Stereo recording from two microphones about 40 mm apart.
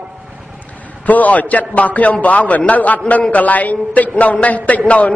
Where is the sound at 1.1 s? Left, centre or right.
Left.